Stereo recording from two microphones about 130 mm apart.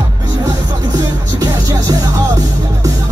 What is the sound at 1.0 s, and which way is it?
Music, 30° right (ahead or behind).